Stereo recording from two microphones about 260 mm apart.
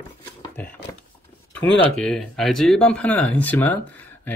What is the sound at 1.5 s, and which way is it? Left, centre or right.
Speech, centre.